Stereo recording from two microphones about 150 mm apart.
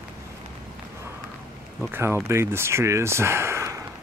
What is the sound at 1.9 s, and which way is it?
Speech, 15° right (ahead or behind).